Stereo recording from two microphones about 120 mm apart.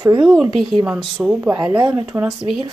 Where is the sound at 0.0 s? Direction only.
35° right (ahead or behind).